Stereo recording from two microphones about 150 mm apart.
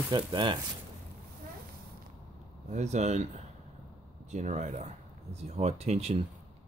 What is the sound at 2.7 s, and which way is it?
Speech, 50° right (ahead or behind).